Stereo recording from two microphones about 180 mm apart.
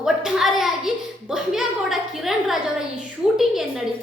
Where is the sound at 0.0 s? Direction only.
5° right (ahead or behind).